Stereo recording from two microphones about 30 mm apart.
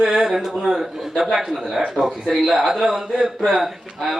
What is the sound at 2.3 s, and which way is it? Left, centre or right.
A man's voice, centre.